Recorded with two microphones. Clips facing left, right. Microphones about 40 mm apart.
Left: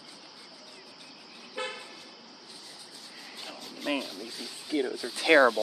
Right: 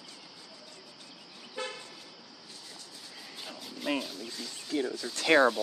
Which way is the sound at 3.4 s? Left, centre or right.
Centre.